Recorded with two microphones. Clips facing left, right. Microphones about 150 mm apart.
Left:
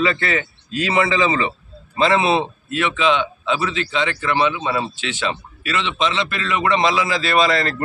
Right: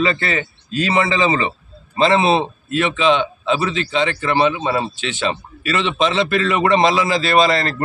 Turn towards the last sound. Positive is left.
turn(degrees=-30)  # may be behind; listen again after turning